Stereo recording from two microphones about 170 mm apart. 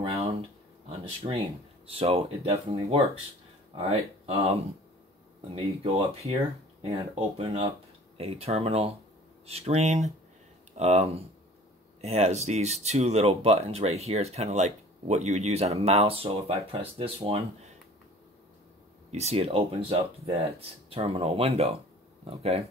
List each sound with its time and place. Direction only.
0.0 s a sound: 35° right (ahead or behind)
0.8 s speech: 35° right (ahead or behind)
5.5 s speech: 35° right (ahead or behind)
19.1 s speech: 35° right (ahead or behind)